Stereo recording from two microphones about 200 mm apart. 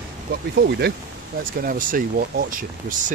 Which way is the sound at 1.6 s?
45° right (ahead or behind).